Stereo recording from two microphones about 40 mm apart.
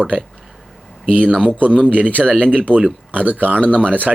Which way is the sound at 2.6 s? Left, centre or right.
Right.